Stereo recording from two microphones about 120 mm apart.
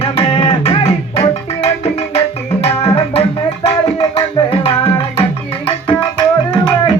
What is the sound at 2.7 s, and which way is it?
Tabla, 25° left (ahead or behind).